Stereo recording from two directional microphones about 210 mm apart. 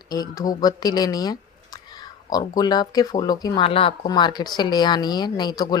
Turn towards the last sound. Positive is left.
turn(degrees=20)  # may be behind; listen again after turning